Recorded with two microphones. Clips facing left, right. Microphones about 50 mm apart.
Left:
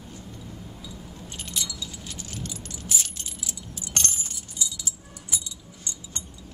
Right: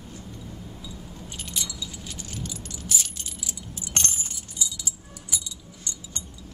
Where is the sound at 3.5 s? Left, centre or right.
Centre.